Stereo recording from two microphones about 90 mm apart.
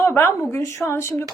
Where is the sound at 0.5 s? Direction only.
35° left (ahead or behind).